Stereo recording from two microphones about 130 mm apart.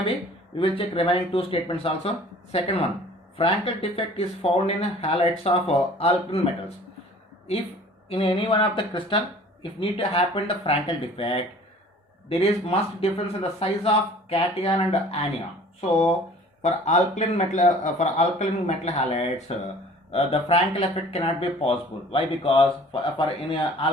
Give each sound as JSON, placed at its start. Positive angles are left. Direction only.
{"t": 0.5, "sound": "speech", "side_deg": 45}
{"t": 8.1, "sound": "speech", "side_deg": 45}
{"t": 16.6, "sound": "speech", "side_deg": 65}
{"t": 18.9, "sound": "speech", "side_deg": 55}